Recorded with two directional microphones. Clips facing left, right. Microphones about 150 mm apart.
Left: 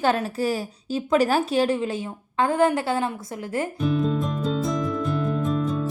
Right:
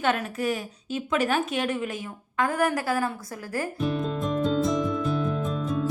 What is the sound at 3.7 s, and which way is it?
Music, centre (ahead or behind).